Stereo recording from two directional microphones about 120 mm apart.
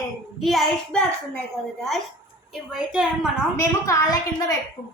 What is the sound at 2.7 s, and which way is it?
Speech, 5° right (ahead or behind).